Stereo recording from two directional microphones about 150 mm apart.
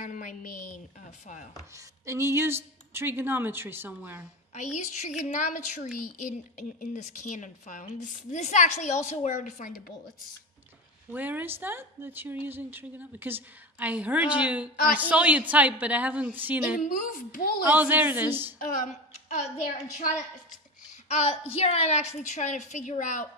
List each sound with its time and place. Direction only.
0.0 s a sound: 60° left (ahead or behind)
1.2 s a woman's voice: 55° left (ahead or behind)
2.0 s a woman's voice: 20° right (ahead or behind)
4.6 s a woman's voice: 50° left (ahead or behind); by 9.9 s 65° left (ahead or behind)
11.1 s a woman's voice: 10° right (ahead or behind)
16.7 s a woman's voice: 70° left (ahead or behind)
17.6 s a woman's voice: 10° right (ahead or behind)
19.2 s a sound: 50° left (ahead or behind)
21.1 s a woman's voice: 45° left (ahead or behind)